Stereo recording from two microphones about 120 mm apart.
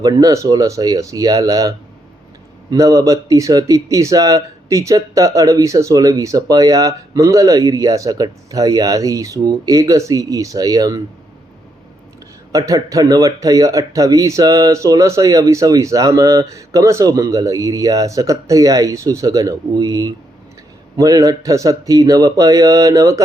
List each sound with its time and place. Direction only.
0.0 s speech: 30° right (ahead or behind)
12.5 s speech: 30° right (ahead or behind)